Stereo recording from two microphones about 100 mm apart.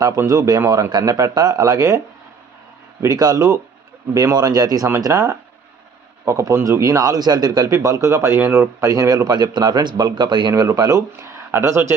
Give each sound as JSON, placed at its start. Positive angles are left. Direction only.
{"t": 0.0, "sound": "a man's voice", "side_deg": -35}
{"t": 3.0, "sound": "a man's voice", "side_deg": -40}
{"t": 5.1, "sound": "a man's voice", "side_deg": -20}
{"t": 10.5, "sound": "a man's voice", "side_deg": -35}